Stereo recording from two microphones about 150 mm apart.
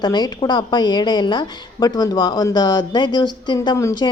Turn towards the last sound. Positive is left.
turn(degrees=25)  # may be behind; listen again after turning